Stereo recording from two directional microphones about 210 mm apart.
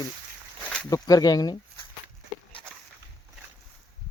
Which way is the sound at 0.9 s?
15° left (ahead or behind).